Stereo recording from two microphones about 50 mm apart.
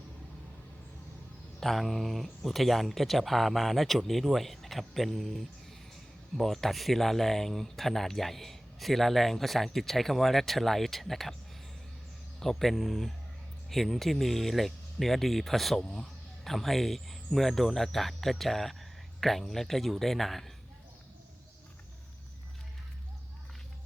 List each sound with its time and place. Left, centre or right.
1.6 s speech: centre
12.4 s speech: centre
15.8 s speech: centre
16.4 s speech: centre